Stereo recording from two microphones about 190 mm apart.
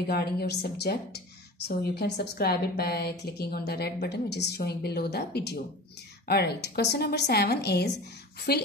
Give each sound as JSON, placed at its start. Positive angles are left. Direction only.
{"t": 0.0, "sound": "a woman's voice", "side_deg": 55}